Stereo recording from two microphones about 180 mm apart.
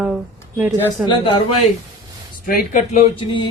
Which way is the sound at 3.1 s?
30° left (ahead or behind).